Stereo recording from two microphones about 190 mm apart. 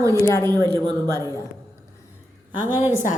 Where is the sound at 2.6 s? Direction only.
10° right (ahead or behind).